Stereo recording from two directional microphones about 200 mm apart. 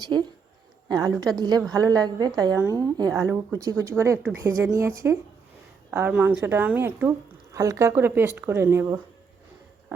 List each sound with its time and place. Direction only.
0.9 s a woman's voice: 20° right (ahead or behind)